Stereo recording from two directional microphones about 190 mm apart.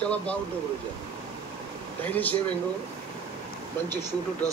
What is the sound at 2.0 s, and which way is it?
Speech, 10° left (ahead or behind).